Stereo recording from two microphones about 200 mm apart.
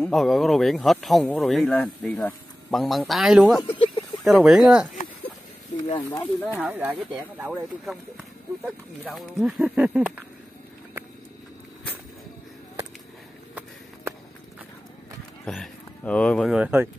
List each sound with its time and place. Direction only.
0.0 s speech: centre (ahead or behind)
3.6 s a sound: 25° left (ahead or behind)
4.2 s speech: centre (ahead or behind)
5.9 s speech: 20° left (ahead or behind)
6.5 s speech: 10° right (ahead or behind)
15.4 s speech: centre (ahead or behind)